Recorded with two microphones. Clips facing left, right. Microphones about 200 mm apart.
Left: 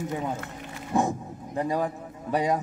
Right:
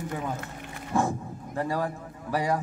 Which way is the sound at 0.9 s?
20° left (ahead or behind).